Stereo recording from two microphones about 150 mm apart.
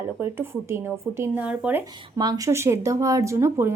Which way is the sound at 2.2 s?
25° right (ahead or behind).